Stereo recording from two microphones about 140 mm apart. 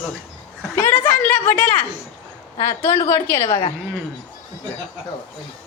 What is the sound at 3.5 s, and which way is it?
Speech, 40° left (ahead or behind).